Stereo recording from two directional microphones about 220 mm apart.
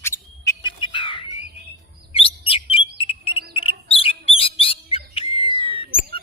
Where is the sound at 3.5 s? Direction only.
25° left (ahead or behind).